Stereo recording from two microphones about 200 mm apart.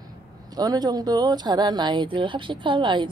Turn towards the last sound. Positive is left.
turn(degrees=-25)  # may be behind; listen again after turning